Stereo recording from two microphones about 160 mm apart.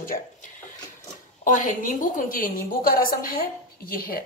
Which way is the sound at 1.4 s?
55° left (ahead or behind).